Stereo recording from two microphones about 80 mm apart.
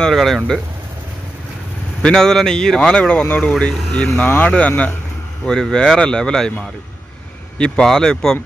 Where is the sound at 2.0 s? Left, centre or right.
Centre.